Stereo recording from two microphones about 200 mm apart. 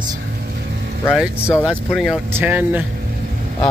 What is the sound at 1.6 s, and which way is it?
Speech, centre (ahead or behind).